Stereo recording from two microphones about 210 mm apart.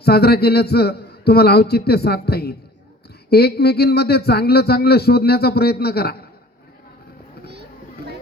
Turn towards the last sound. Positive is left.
turn(degrees=-50)  # may be behind; listen again after turning